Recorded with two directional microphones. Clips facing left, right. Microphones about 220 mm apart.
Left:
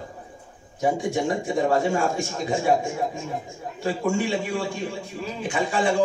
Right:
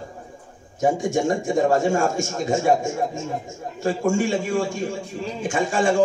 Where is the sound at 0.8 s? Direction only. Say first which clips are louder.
Right 3 dB; 45° right (ahead or behind).